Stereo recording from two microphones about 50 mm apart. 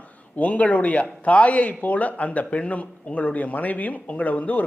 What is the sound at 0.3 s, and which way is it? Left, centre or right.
A man's voice, left.